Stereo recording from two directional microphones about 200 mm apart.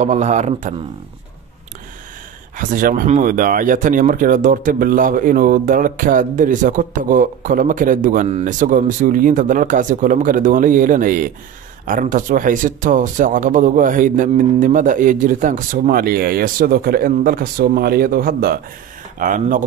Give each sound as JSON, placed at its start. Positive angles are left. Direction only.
{"t": 0.0, "sound": "speech", "side_deg": -35}
{"t": 2.5, "sound": "speech", "side_deg": -40}